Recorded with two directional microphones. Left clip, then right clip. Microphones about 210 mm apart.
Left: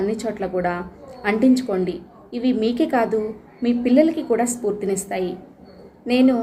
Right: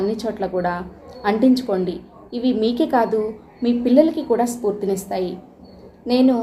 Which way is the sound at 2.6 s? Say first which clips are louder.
Right 2 dB; 25° left (ahead or behind).